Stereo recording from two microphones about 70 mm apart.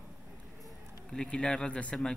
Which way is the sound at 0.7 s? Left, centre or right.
Centre.